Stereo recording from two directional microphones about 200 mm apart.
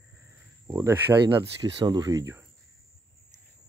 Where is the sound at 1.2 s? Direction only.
20° right (ahead or behind).